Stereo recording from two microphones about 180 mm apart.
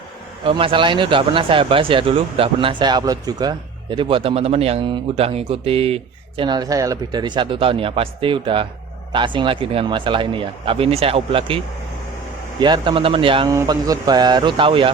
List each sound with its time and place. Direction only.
0.4 s speech: 30° right (ahead or behind)
13.5 s speech: 20° right (ahead or behind)